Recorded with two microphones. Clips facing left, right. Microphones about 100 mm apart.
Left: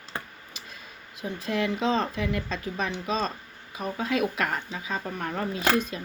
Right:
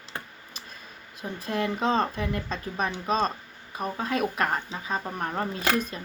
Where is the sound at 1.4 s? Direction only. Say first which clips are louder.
Even; 40° right (ahead or behind).